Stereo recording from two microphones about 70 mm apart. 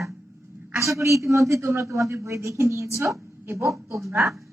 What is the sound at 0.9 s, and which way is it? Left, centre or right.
A man's voice, right.